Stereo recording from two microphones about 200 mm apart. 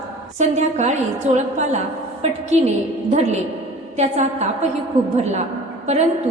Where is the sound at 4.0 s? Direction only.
35° right (ahead or behind).